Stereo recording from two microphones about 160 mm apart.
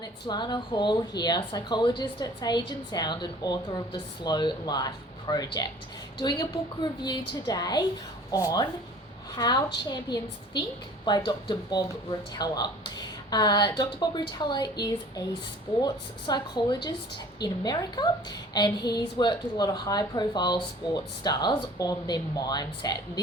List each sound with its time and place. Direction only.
0.0 s a woman's voice: 25° left (ahead or behind)